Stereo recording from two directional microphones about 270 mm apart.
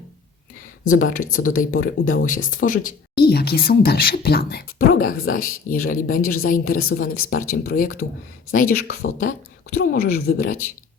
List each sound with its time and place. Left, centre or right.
0.9 s speech: left